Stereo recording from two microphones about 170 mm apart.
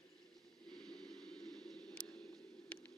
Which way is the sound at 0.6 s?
5° left (ahead or behind).